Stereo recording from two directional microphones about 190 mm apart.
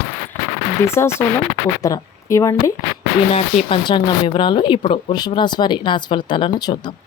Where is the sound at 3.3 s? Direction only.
35° left (ahead or behind).